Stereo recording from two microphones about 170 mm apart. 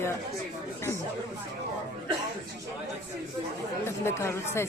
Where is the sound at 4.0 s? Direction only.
15° left (ahead or behind).